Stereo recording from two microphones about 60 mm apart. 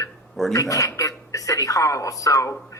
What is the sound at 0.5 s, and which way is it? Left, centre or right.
A woman's voice, left.